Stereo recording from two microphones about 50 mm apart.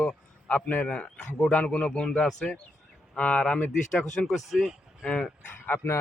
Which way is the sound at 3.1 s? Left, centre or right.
Left.